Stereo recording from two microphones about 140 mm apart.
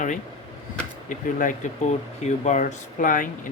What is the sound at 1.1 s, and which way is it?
Speech, 70° left (ahead or behind).